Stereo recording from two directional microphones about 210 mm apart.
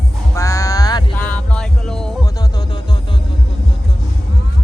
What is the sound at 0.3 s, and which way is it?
Music, 15° left (ahead or behind).